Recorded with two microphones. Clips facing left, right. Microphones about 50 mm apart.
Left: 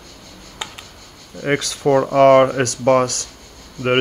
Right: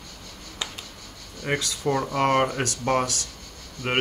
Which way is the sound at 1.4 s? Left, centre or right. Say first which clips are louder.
Left 8 dB; left.